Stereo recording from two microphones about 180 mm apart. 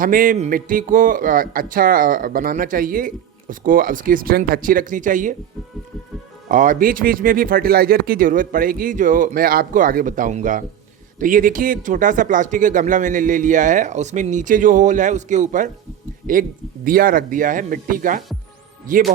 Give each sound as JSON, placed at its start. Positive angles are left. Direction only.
{"t": 0.0, "sound": "speech", "side_deg": -50}
{"t": 6.5, "sound": "speech", "side_deg": -45}